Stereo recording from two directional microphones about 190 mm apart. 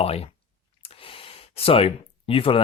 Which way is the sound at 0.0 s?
30° left (ahead or behind).